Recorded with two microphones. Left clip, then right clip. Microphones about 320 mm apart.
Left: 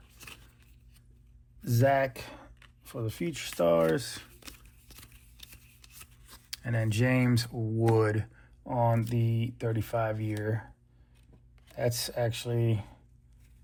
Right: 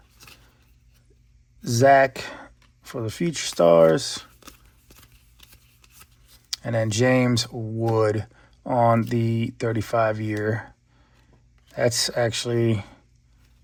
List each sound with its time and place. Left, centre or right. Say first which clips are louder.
1.6 s a sound: right 10 dB; centre
3.1 s speech: right 9 dB; right
6.5 s speech: right 10 dB; centre
8.9 s speech: right 10 dB; right
9.3 s speech: right 8 dB; right
11.9 s speech: right 8 dB; right
12.5 s speech: right 9 dB; right